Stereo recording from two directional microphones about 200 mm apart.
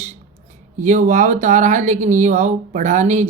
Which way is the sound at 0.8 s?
40° right (ahead or behind).